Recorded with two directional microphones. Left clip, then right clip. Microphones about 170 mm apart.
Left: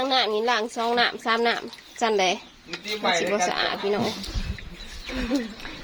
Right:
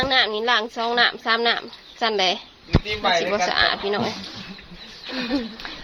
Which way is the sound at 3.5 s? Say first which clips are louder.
Right 4 dB; 15° left (ahead or behind).